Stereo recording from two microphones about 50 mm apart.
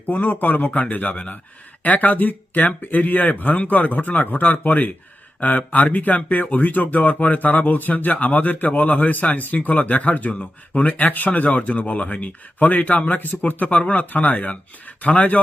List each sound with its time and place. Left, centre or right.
0.0 s speech: left